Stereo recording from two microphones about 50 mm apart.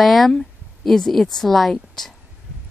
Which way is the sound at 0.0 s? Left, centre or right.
Centre.